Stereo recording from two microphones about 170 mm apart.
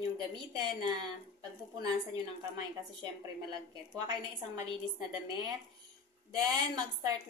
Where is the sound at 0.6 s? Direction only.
25° right (ahead or behind).